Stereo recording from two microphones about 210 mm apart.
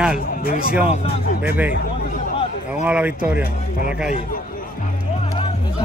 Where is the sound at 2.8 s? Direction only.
5° right (ahead or behind).